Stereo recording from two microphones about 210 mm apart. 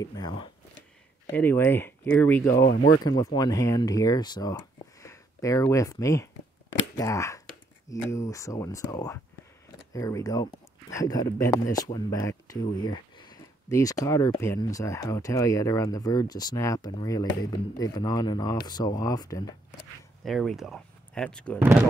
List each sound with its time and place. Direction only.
0.0 s speech: 20° left (ahead or behind)
1.2 s speech: 10° left (ahead or behind)
2.5 s speech: 45° left (ahead or behind)
3.0 s speech: 20° left (ahead or behind)
20.2 s speech: centre (ahead or behind)